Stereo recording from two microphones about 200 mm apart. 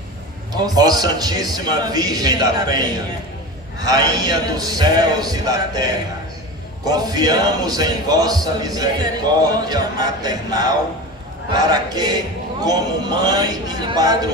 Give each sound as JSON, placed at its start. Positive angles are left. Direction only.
{"t": 0.5, "sound": "a man's voice", "side_deg": -20}